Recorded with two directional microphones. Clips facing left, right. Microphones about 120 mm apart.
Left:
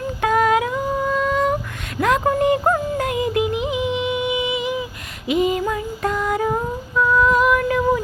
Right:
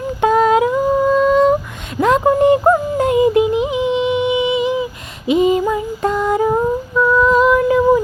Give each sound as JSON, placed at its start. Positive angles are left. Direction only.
{"t": 0.2, "sound": "humming", "side_deg": -25}
{"t": 2.0, "sound": "music", "side_deg": -25}
{"t": 5.3, "sound": "female singing", "side_deg": -25}